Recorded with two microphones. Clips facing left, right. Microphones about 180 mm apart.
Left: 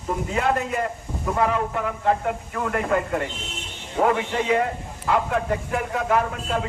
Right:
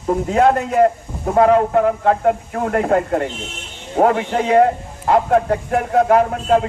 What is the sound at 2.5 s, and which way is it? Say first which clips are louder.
A man's voice: right 6 dB; 40° right (ahead or behind).